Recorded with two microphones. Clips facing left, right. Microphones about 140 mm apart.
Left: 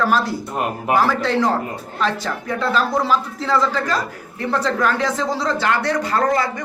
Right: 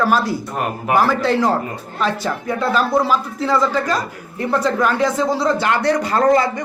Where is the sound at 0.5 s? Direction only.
20° left (ahead or behind).